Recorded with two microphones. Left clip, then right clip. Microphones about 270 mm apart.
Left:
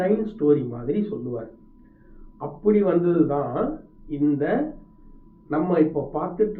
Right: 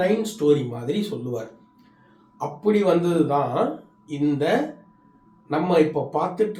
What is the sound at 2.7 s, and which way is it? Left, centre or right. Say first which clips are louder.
Speech: even; right.